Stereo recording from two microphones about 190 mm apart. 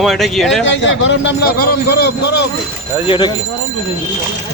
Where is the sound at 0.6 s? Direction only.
70° left (ahead or behind).